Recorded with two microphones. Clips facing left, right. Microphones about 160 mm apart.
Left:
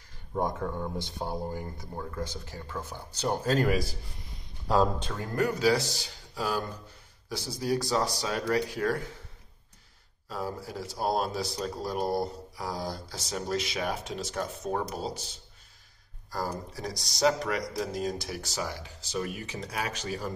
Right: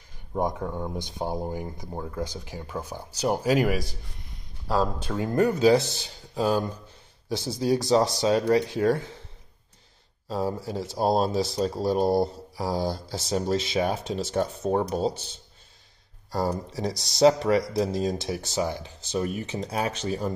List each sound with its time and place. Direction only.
0.3 s speech: 15° right (ahead or behind)
5.0 s speech: 20° right (ahead or behind)
10.2 s speech: 30° right (ahead or behind)
16.3 s speech: 25° right (ahead or behind)